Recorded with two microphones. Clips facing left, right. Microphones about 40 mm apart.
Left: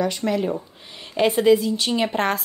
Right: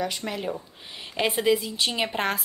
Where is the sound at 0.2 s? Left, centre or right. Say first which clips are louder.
Left 9 dB; centre.